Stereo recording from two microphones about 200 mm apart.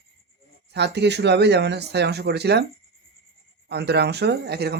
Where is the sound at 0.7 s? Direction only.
60° right (ahead or behind).